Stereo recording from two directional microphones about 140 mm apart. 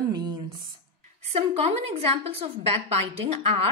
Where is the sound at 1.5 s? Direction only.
50° right (ahead or behind).